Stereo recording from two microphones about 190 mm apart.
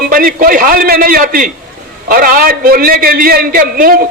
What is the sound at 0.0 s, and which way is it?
A man's voice, 50° right (ahead or behind).